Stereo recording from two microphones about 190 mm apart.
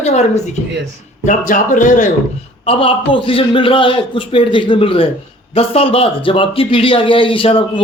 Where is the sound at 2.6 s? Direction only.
30° left (ahead or behind).